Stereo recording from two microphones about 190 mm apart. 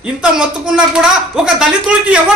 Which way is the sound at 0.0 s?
5° right (ahead or behind).